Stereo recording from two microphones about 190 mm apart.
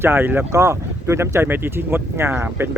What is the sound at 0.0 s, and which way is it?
Speech, 10° right (ahead or behind).